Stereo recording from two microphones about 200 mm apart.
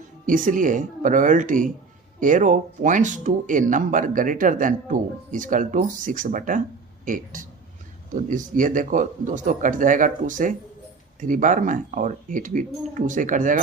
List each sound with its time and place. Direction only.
0.3 s speech: 40° right (ahead or behind)